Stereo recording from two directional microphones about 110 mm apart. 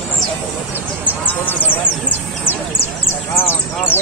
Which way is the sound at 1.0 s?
15° left (ahead or behind).